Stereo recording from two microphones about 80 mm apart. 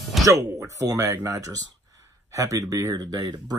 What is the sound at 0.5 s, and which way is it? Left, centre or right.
Speech, right.